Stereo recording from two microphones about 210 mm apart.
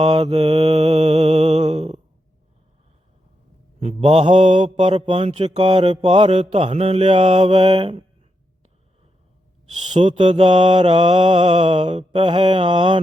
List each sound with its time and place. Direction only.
0.0 s mantra: 25° right (ahead or behind)
3.8 s mantra: 30° right (ahead or behind)
9.7 s mantra: 35° right (ahead or behind)